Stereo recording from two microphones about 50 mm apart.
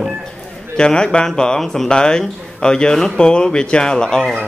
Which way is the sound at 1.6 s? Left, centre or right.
Centre.